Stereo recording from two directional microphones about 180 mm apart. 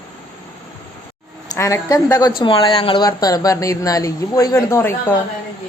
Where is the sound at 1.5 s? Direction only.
15° left (ahead or behind).